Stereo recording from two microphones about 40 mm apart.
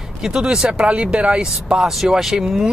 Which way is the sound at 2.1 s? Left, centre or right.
Centre.